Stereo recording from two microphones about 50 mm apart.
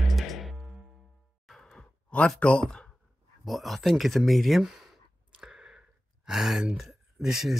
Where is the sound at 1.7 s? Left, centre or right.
Centre.